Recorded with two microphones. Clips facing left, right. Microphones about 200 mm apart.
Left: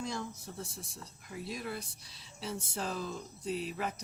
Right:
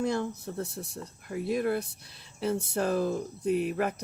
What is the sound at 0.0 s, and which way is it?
Speech, 60° right (ahead or behind).